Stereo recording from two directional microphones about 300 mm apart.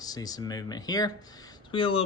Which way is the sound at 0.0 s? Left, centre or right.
Centre.